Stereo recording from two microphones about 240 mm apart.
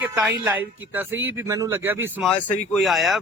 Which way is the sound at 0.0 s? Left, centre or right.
Centre.